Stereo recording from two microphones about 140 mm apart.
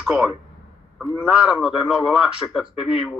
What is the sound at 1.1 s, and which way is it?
A man's voice, 5° right (ahead or behind).